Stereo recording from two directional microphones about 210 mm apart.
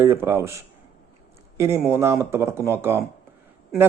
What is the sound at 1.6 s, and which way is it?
A man's voice, 15° right (ahead or behind).